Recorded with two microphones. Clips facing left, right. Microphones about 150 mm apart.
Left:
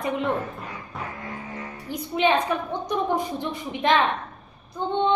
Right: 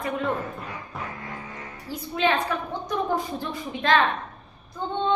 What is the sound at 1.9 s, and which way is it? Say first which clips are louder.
A woman's voice: left 2 dB; 20° left (ahead or behind).